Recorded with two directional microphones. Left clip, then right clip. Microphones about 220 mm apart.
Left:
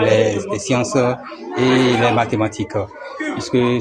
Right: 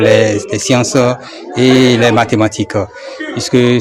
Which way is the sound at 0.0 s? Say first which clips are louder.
Right 6 dB; 50° right (ahead or behind).